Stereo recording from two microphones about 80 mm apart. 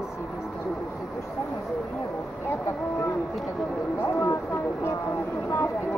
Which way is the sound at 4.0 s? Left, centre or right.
Left.